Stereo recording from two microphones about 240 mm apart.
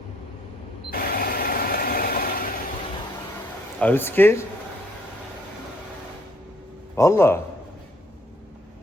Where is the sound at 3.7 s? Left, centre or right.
Centre.